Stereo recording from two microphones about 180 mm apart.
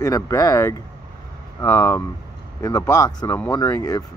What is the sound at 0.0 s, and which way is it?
Speech, 20° left (ahead or behind).